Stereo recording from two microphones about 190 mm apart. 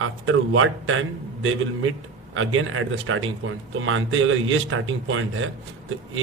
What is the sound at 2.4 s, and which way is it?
Speech, 90° right.